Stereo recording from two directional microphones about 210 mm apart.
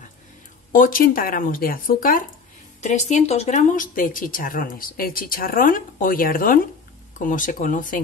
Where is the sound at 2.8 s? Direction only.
30° left (ahead or behind).